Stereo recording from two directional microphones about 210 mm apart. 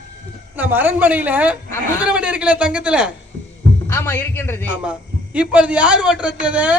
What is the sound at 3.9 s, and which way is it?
Speech, 10° left (ahead or behind).